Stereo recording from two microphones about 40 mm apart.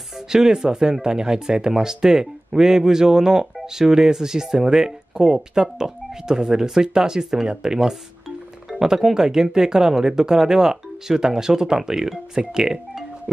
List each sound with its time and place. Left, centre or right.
0.3 s speech: centre